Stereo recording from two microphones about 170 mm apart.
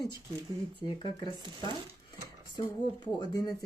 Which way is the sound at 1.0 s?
25° left (ahead or behind).